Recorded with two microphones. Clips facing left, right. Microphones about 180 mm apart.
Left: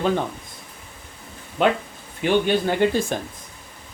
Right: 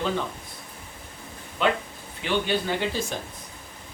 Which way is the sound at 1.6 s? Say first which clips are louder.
Left 4 dB; 50° left (ahead or behind).